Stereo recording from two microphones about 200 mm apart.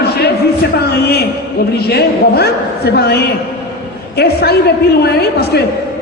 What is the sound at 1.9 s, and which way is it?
A woman's voice, 55° left (ahead or behind).